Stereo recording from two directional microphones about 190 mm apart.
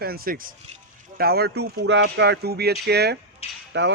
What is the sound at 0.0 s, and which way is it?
Speech, 55° right (ahead or behind).